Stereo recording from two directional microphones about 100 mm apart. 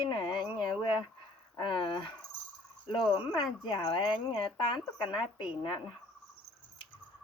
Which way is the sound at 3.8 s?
65° left (ahead or behind).